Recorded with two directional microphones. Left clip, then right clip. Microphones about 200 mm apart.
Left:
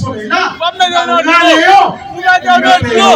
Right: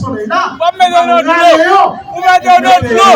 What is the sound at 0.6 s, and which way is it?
A man's voice, 30° right (ahead or behind).